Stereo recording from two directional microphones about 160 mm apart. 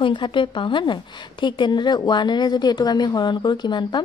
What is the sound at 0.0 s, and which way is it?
A woman's voice, 30° left (ahead or behind).